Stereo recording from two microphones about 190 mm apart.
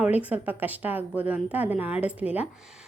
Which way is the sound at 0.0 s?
5° right (ahead or behind).